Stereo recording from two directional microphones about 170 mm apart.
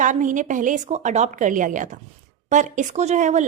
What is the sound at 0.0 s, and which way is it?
Speech, 50° right (ahead or behind).